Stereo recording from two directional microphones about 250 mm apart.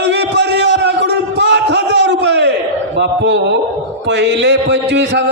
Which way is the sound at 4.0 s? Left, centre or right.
Right.